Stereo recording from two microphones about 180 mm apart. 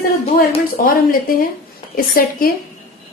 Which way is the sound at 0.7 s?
50° left (ahead or behind).